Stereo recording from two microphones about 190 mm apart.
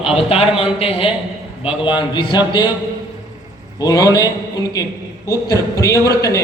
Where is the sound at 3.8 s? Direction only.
20° left (ahead or behind).